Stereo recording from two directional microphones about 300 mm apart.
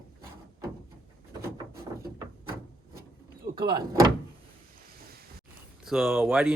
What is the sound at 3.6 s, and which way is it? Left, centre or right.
Speech, centre.